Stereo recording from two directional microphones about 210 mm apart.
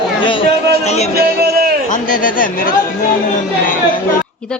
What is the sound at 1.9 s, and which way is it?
Speech, 40° left (ahead or behind).